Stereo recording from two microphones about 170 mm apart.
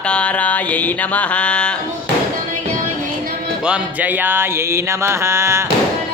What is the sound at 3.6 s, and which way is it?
Music, 5° right (ahead or behind).